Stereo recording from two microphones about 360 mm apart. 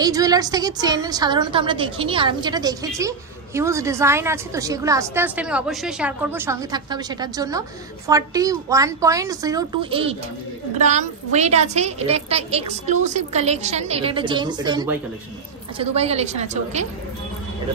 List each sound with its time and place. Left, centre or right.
0.0 s a woman's voice: centre